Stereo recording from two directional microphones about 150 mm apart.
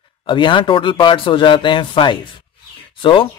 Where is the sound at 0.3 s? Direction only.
35° left (ahead or behind).